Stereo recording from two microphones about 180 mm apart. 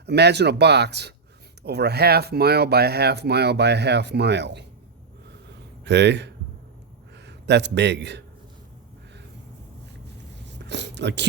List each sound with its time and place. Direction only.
0.0 s speech: 70° right (ahead or behind)
5.8 s a man's voice: 75° right (ahead or behind)
10.4 s a sound: 75° right (ahead or behind)